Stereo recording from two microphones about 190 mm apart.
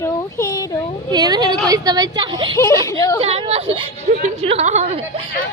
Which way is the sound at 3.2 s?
30° right (ahead or behind).